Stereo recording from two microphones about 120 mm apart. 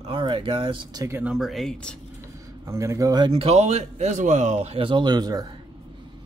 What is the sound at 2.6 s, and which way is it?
Speech, 25° right (ahead or behind).